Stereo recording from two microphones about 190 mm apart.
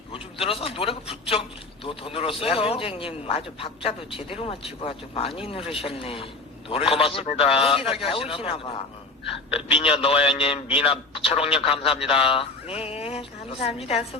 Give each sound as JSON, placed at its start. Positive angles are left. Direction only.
{"t": 0.1, "sound": "a man's voice", "side_deg": 30}